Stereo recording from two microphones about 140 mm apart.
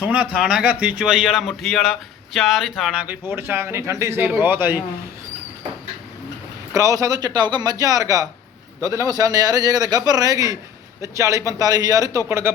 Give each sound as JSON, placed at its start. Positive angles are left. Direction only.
{"t": 0.0, "sound": "a man's voice", "side_deg": -10}
{"t": 6.7, "sound": "a man's voice", "side_deg": -25}